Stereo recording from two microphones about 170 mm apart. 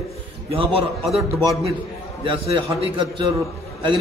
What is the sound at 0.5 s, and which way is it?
Speech, 30° right (ahead or behind).